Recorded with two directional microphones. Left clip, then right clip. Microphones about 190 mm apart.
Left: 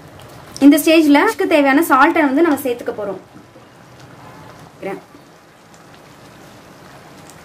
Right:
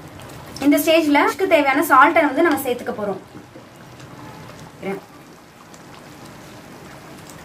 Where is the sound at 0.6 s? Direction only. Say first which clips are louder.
Left 5 dB; 50° left (ahead or behind).